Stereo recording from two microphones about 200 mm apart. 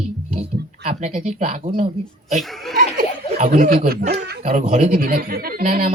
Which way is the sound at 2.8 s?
45° right (ahead or behind).